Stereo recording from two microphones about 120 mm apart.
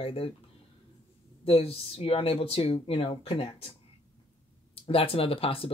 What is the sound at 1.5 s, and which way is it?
Speech, 55° left (ahead or behind).